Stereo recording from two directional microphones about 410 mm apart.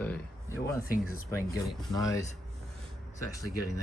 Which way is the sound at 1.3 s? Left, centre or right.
Centre.